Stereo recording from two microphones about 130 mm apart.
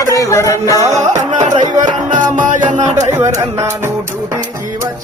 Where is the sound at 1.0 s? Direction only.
65° right (ahead or behind).